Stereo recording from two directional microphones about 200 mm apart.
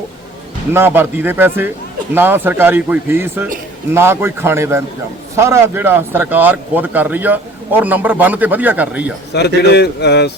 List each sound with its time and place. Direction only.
0.7 s speech: 10° right (ahead or behind)
9.3 s a man's voice: 55° left (ahead or behind)